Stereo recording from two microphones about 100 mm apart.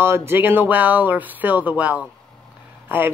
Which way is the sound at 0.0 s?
25° right (ahead or behind).